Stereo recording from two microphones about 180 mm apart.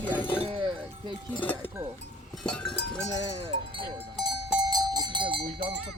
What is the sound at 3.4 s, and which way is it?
Speech, 30° right (ahead or behind).